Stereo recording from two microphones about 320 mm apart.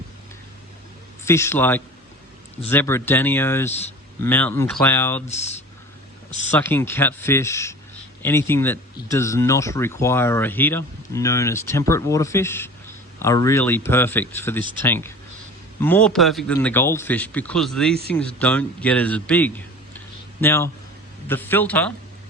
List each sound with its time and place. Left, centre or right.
1.2 s speech: centre
5.3 s speech: left
6.5 s speech: centre